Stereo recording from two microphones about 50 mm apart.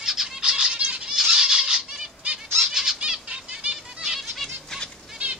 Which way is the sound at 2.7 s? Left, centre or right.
Centre.